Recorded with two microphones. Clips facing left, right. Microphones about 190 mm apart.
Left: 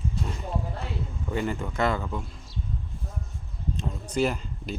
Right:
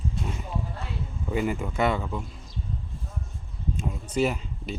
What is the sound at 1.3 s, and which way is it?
Speech, 5° right (ahead or behind).